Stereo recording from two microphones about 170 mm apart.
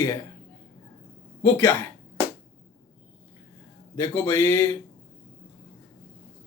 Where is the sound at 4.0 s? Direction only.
15° left (ahead or behind).